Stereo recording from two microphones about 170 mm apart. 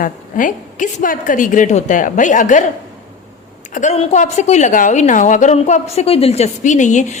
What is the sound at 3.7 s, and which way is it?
A woman's voice, 45° left (ahead or behind).